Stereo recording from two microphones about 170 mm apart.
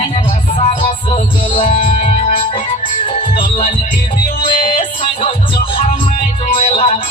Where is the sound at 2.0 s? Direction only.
40° left (ahead or behind).